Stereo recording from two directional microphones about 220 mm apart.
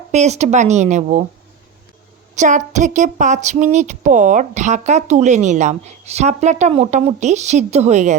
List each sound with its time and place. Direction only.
0.1 s speech: 30° right (ahead or behind)
2.3 s speech: 35° right (ahead or behind)